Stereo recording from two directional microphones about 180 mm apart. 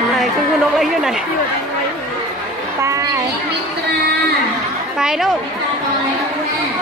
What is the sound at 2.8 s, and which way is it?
Children playing, 20° right (ahead or behind).